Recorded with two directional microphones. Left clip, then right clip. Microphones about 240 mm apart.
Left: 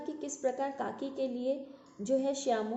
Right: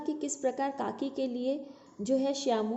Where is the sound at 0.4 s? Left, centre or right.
Right.